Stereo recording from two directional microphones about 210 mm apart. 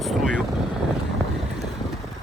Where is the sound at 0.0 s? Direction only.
Centre (ahead or behind).